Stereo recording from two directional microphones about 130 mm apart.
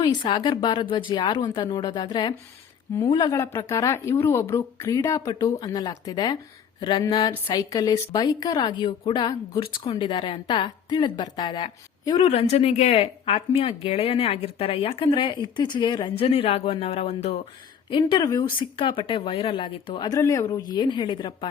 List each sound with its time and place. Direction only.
0.0 s a woman's voice: 30° left (ahead or behind)
3.3 s a woman's voice: 20° left (ahead or behind); by 12.3 s 35° left (ahead or behind)
12.3 s speech: 50° left (ahead or behind)
17.9 s a woman's voice: 35° left (ahead or behind)
20.1 s a woman's voice: 25° left (ahead or behind)